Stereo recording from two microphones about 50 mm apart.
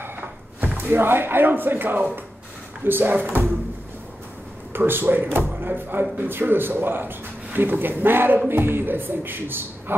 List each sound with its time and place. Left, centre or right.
0.7 s speech: right
4.7 s speech: right